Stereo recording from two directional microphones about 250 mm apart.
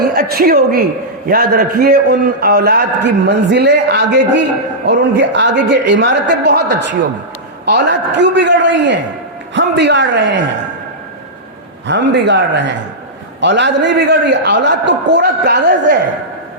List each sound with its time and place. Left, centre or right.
0.1 s a man's voice: right
11.9 s a man's voice: right